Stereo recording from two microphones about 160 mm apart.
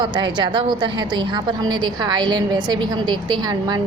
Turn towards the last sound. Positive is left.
turn(degrees=-25)  # may be behind; listen again after turning